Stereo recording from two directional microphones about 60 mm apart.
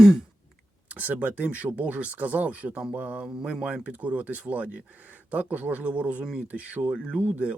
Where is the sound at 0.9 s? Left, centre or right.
Right.